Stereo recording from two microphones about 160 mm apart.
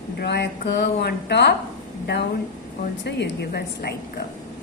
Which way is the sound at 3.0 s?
90° left.